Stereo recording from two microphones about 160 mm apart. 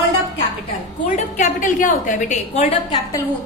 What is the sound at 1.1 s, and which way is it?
A woman's voice, 50° left (ahead or behind).